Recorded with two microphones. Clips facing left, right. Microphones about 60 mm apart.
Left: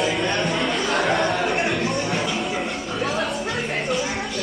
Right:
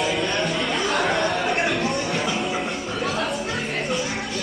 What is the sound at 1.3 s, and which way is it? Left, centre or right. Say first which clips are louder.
Music: even; centre.